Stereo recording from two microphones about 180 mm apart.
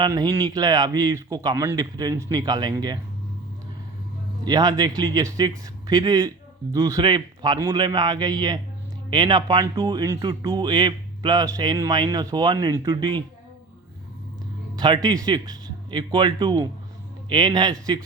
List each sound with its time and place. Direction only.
0.0 s speech: 20° right (ahead or behind)
4.4 s speech: 20° right (ahead or behind)
14.8 s speech: 25° right (ahead or behind)